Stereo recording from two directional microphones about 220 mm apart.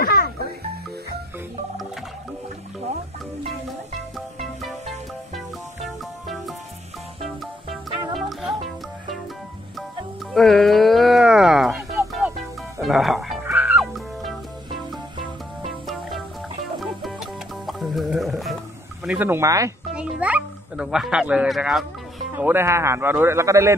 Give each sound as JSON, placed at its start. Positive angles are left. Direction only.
{"t": 0.0, "sound": "music", "side_deg": 45}
{"t": 4.4, "sound": "music", "side_deg": 0}
{"t": 10.3, "sound": "a sound", "side_deg": 0}
{"t": 12.1, "sound": "music", "side_deg": 0}
{"t": 15.6, "sound": "music", "side_deg": 0}
{"t": 19.0, "sound": "a man's voice", "side_deg": -10}
{"t": 19.9, "sound": "music", "side_deg": -5}
{"t": 22.3, "sound": "a man's voice", "side_deg": -10}